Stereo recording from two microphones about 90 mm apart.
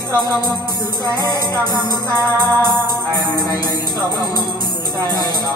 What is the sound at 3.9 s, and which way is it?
Music, 45° right (ahead or behind).